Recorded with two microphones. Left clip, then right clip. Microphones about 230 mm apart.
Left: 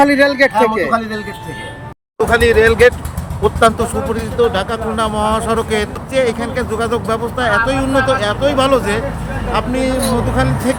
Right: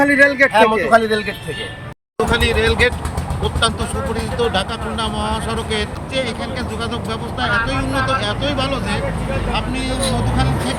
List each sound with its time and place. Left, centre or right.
0.0 s speech: centre
2.3 s speech: centre